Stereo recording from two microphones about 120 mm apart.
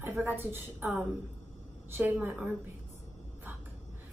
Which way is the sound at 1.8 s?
15° right (ahead or behind).